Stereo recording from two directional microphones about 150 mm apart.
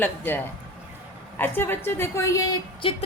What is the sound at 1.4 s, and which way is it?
A woman's voice, 15° left (ahead or behind).